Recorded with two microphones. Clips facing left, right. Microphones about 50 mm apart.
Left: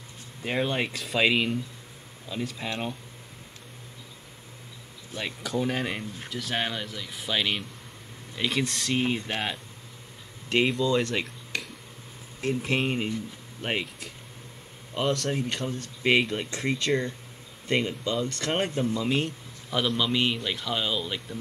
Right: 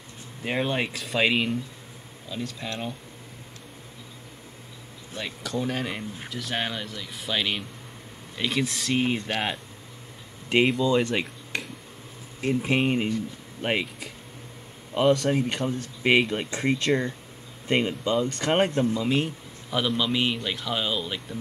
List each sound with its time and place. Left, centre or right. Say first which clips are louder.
0.4 s a man's voice: right 1 dB; centre
2.2 s speech: left 1 dB; centre
5.2 s a man's voice: left 1 dB; centre
10.5 s speech: right 2 dB; centre
16.2 s a man's voice: right 2 dB; centre
16.4 s speech: right 3 dB; right
18.8 s a man's voice: right 2 dB; centre